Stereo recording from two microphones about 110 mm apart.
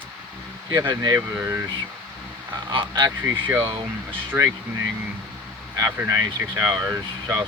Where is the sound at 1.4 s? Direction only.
25° right (ahead or behind).